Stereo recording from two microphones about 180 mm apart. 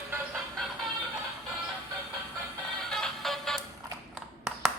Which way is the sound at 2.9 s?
Centre (ahead or behind).